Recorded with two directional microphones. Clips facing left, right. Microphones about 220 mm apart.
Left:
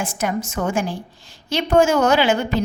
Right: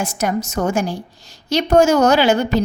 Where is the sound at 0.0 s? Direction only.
40° right (ahead or behind).